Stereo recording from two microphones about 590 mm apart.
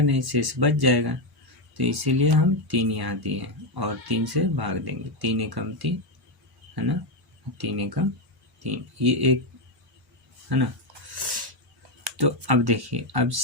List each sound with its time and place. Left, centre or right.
0.1 s speech: right
10.5 s speech: right
11.1 s a sound: right
12.0 s speech: right